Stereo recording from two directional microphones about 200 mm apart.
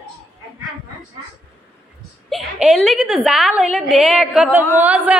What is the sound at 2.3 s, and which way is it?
A woman's voice, centre (ahead or behind).